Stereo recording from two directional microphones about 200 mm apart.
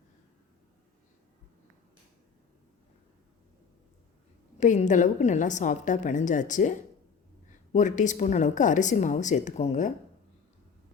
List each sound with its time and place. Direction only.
4.5 s a woman's voice: 35° left (ahead or behind)